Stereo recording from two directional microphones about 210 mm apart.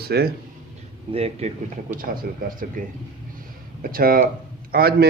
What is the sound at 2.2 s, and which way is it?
Speech, 50° right (ahead or behind).